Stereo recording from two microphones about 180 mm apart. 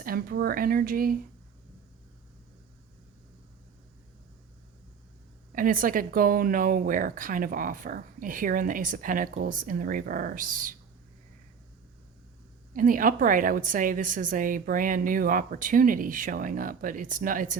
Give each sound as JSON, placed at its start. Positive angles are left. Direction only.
{"t": 0.0, "sound": "speech", "side_deg": -55}
{"t": 5.5, "sound": "speech", "side_deg": -50}
{"t": 12.7, "sound": "speech", "side_deg": -50}